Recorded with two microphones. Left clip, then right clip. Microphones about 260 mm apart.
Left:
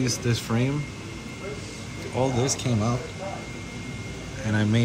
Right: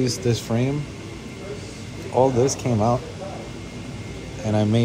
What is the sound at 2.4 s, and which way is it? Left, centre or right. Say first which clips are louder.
Speech: right 6 dB; centre.